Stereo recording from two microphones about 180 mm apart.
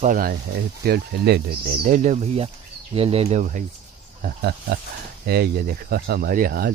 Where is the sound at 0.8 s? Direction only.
60° right (ahead or behind).